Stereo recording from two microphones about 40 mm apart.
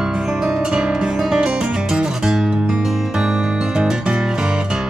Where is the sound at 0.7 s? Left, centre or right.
Centre.